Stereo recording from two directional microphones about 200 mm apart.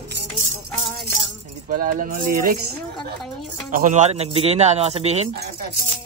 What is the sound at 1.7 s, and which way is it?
Speech, 45° right (ahead or behind).